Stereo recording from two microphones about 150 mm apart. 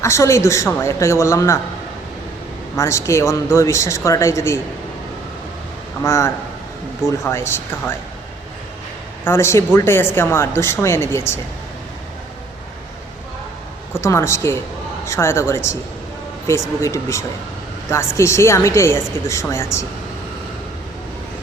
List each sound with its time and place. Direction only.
0.0 s a man's voice: 20° left (ahead or behind)
2.7 s a man's voice: 20° left (ahead or behind)
6.0 s speech: 20° left (ahead or behind)
9.2 s speech: 15° left (ahead or behind)
13.9 s a man's voice: 20° left (ahead or behind)
16.8 s a man's voice: 20° left (ahead or behind)